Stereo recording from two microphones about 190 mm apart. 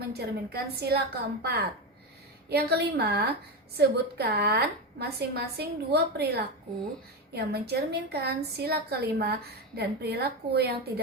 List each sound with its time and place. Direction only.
0.1 s a woman's voice: 55° right (ahead or behind)